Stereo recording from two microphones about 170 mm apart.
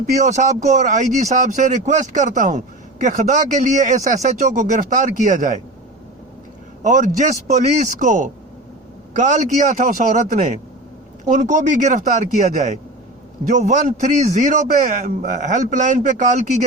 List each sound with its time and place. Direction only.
0.0 s speech: 45° right (ahead or behind)
6.8 s speech: 45° right (ahead or behind)